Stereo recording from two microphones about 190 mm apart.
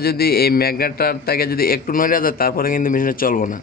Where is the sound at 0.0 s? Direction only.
55° left (ahead or behind).